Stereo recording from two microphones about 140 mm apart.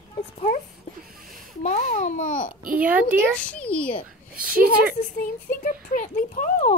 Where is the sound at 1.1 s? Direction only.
90° right.